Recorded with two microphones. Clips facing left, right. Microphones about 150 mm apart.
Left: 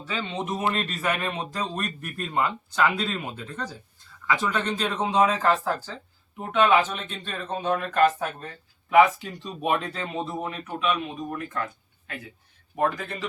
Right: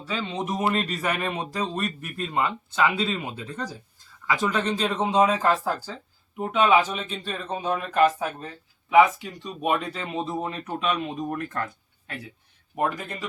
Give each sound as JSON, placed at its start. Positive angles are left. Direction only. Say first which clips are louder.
{"t": 0.0, "sound": "speech", "louder": "right 1 dB", "side_deg": -5}
{"t": 10.4, "sound": "speech", "louder": "even", "side_deg": -30}
{"t": 12.7, "sound": "speech", "louder": "left 1 dB", "side_deg": -15}